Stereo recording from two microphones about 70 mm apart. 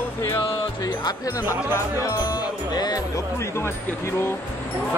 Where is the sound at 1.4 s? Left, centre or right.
Left.